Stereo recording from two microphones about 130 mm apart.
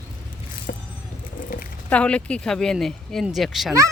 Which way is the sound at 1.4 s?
90° left.